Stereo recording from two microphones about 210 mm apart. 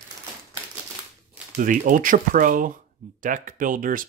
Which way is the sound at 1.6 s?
40° right (ahead or behind).